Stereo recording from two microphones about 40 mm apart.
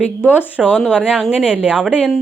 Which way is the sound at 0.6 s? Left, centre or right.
Right.